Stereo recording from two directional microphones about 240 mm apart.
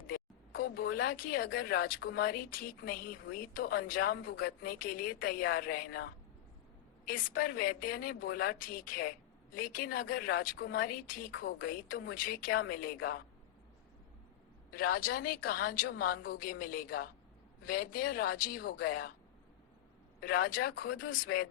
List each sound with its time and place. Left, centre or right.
0.1 s speech: left
14.7 s speech: left
20.2 s speech: left